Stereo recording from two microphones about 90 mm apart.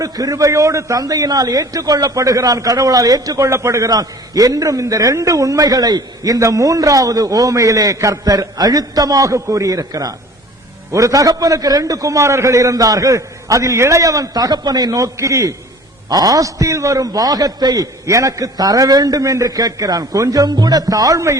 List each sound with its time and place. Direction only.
0.0 s a man's voice: 40° right (ahead or behind)